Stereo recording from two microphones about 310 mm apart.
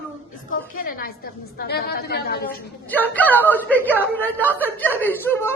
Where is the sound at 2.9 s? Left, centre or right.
Centre.